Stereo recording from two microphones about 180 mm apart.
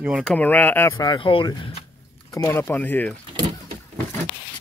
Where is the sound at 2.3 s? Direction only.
15° left (ahead or behind).